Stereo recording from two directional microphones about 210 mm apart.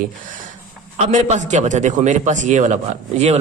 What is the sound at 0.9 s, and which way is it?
A man's voice, 30° right (ahead or behind).